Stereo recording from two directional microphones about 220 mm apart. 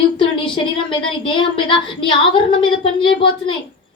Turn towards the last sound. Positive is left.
turn(degrees=25)  # may be behind; listen again after turning